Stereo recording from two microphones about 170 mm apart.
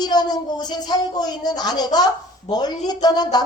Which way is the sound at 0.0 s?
25° left (ahead or behind).